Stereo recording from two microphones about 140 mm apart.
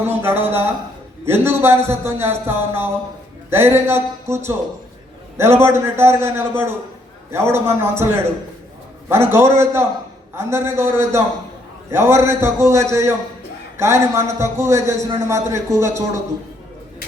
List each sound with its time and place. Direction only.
0.0 s a man's voice: 15° right (ahead or behind)